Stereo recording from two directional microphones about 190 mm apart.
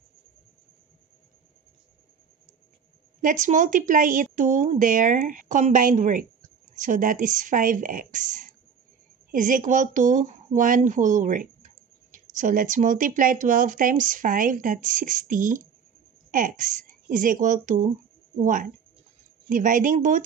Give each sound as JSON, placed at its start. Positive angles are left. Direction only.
{"t": 3.2, "sound": "speech", "side_deg": -40}